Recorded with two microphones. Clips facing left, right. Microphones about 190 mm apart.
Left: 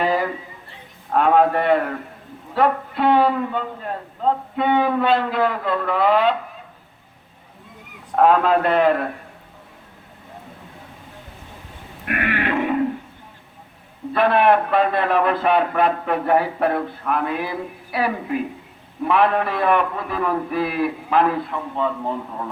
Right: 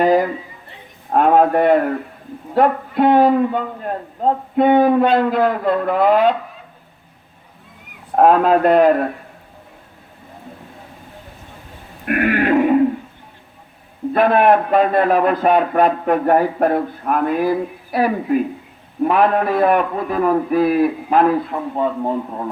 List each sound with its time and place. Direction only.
0.0 s a man's voice: 45° right (ahead or behind)
8.1 s a man's voice: 45° right (ahead or behind)
12.0 s a sound: 45° right (ahead or behind)
14.1 s a man's voice: 45° right (ahead or behind)